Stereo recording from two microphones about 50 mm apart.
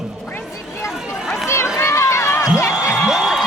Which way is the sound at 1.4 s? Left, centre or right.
Left.